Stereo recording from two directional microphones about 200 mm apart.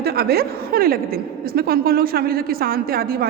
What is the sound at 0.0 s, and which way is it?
A woman's voice, 50° right (ahead or behind).